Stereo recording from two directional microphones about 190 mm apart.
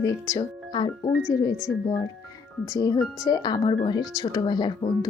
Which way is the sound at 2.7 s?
20° left (ahead or behind).